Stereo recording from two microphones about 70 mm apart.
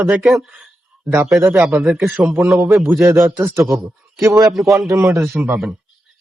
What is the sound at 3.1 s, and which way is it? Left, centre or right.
Speech, centre.